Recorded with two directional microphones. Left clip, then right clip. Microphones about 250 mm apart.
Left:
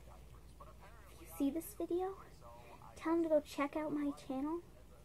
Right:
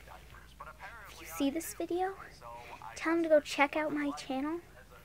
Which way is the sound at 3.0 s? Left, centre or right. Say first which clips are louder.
Right 6 dB; centre.